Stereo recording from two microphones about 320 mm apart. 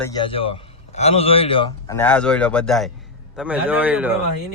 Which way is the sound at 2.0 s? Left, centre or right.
Centre.